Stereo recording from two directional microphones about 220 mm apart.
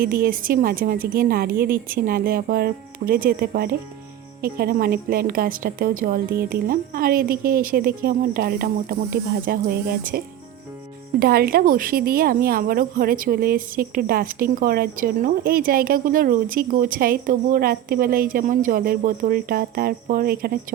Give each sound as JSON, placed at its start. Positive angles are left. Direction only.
{"t": 0.0, "sound": "speech", "side_deg": -40}